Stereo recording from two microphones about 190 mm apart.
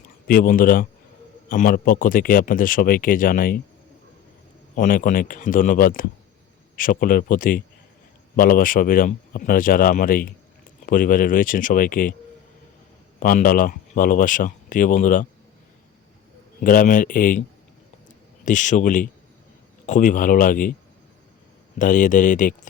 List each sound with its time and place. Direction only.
0.3 s speech: 45° left (ahead or behind)
4.7 s speech: 45° left (ahead or behind)
13.1 s speech: 45° left (ahead or behind)
16.6 s speech: 45° left (ahead or behind)
18.4 s speech: 40° left (ahead or behind)
21.8 s speech: 40° left (ahead or behind)